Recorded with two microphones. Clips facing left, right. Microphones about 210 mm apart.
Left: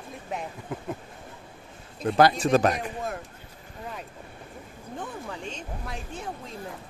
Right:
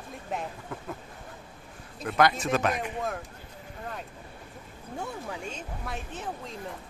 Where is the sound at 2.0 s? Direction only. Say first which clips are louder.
Left 4 dB; 30° left (ahead or behind).